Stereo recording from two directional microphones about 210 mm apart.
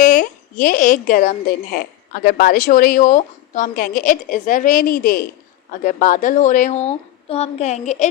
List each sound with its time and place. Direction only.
0.0 s speech: 40° left (ahead or behind)